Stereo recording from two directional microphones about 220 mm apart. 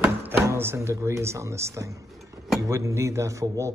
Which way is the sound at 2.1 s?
Centre (ahead or behind).